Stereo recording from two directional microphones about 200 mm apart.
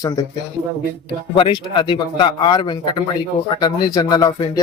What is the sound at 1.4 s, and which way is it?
Speech, 25° left (ahead or behind).